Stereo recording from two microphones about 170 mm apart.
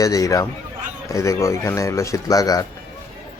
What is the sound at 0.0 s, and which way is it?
Speech, 20° left (ahead or behind).